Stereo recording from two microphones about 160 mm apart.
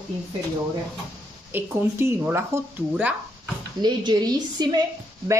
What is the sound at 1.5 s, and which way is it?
Speech, 15° right (ahead or behind).